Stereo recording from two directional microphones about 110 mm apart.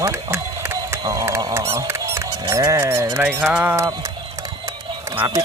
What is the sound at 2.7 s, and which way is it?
Speech, 25° right (ahead or behind).